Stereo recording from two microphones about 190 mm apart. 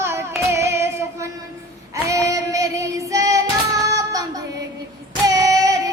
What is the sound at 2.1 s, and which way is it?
Child singing, 15° right (ahead or behind).